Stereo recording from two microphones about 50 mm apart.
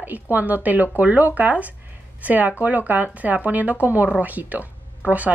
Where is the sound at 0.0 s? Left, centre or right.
Right.